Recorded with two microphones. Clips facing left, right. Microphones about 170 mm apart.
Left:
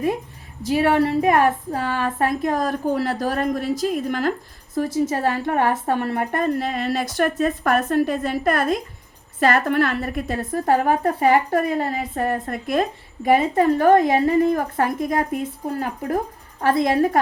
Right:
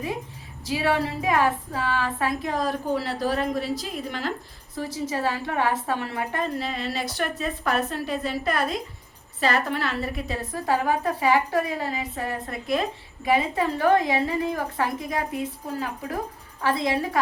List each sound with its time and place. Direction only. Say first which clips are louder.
0.6 s a woman's voice: left 6 dB; 55° left (ahead or behind)
16.6 s a woman's voice: left 6 dB; 50° left (ahead or behind)